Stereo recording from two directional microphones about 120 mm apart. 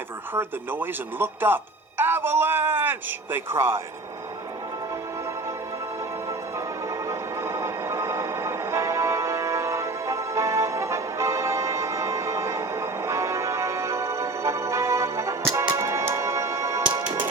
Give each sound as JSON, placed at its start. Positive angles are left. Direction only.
{"t": 0.3, "sound": "speech", "side_deg": -15}
{"t": 7.1, "sound": "music", "side_deg": -25}